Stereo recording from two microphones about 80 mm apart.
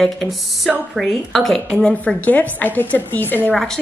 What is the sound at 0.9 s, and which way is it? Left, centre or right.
Speech, centre.